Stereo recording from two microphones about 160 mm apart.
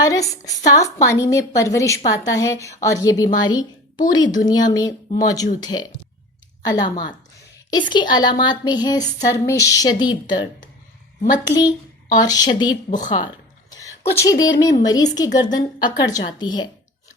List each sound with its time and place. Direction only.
0.0 s a woman's voice: 20° left (ahead or behind)